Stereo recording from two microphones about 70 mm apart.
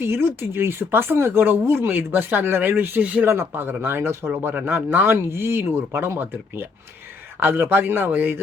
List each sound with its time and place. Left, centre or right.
0.0 s speech: right
4.5 s speech: right